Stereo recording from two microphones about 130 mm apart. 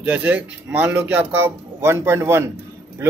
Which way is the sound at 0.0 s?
10° right (ahead or behind).